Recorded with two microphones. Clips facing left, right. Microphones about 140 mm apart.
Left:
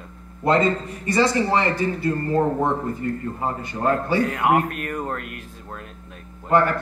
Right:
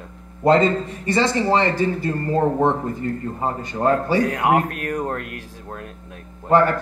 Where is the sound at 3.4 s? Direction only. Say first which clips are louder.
Right 5 dB; 35° right (ahead or behind).